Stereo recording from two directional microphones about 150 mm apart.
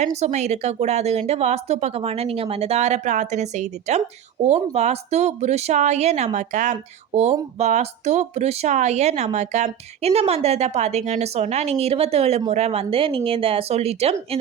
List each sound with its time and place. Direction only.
0.0 s speech: 50° right (ahead or behind)